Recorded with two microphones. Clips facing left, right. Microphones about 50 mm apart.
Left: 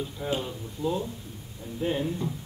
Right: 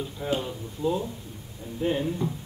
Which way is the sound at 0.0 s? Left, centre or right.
Centre.